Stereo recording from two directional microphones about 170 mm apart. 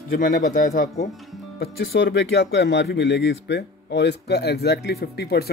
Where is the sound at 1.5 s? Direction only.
65° left (ahead or behind).